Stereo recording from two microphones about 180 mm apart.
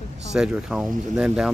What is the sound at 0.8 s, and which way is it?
Speech, 45° right (ahead or behind).